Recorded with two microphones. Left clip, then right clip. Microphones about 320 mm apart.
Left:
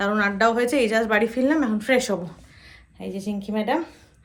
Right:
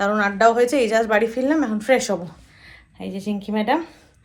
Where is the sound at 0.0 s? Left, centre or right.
Centre.